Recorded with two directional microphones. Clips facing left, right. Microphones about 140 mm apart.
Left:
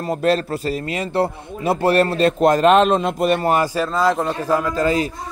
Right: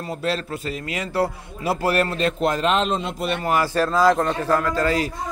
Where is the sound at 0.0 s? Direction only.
45° left (ahead or behind).